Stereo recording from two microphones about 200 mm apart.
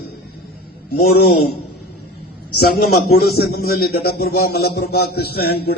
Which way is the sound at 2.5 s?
50° left (ahead or behind).